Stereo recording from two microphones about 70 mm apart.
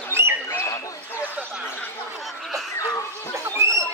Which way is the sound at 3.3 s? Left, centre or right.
Right.